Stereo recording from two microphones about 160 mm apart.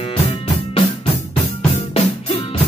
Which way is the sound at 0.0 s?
40° left (ahead or behind).